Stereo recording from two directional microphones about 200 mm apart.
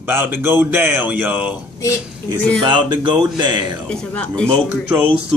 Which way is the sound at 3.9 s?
5° left (ahead or behind).